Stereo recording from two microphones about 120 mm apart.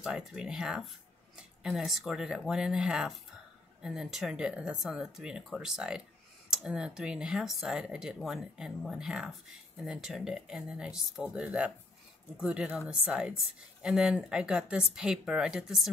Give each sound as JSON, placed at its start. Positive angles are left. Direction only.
{"t": 0.0, "sound": "a woman's voice", "side_deg": -5}